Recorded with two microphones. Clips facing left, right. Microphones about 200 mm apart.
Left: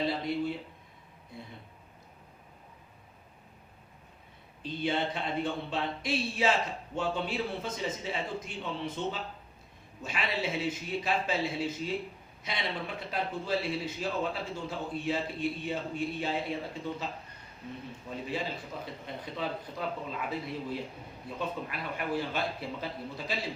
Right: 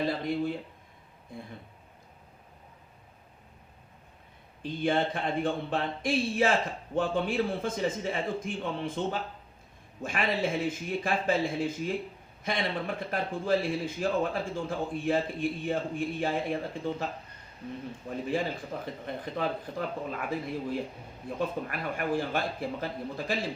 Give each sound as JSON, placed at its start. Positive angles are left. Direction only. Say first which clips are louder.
{"t": 0.0, "sound": "speech", "louder": "right 2 dB", "side_deg": -50}
{"t": 4.6, "sound": "a man's voice", "louder": "right 4 dB", "side_deg": -50}
{"t": 18.3, "sound": "speech", "louder": "right 5 dB", "side_deg": -50}